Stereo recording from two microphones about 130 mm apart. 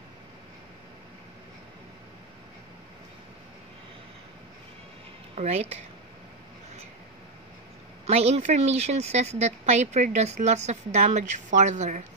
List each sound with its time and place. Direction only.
5.3 s speech: 55° right (ahead or behind)
8.1 s speech: 55° right (ahead or behind)